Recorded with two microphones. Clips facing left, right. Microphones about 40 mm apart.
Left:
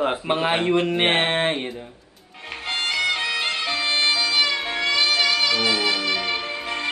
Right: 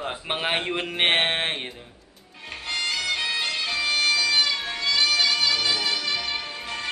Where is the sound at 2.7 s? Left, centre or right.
Left.